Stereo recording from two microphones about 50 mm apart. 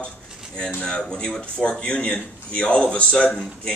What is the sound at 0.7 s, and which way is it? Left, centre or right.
A man's voice, centre.